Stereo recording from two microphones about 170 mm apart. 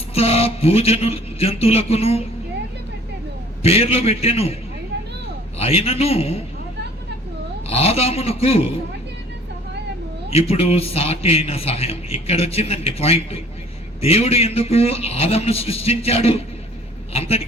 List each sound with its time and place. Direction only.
0.1 s a man's voice: 35° left (ahead or behind)
3.6 s a man's voice: 35° left (ahead or behind)
5.5 s a man's voice: 35° left (ahead or behind)
7.7 s a man's voice: 35° left (ahead or behind)
10.3 s a man's voice: 35° left (ahead or behind)